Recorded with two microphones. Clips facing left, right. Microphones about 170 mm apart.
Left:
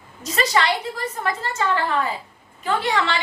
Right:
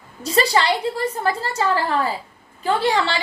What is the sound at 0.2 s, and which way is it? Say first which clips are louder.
A woman's voice: right 3 dB; 30° right (ahead or behind).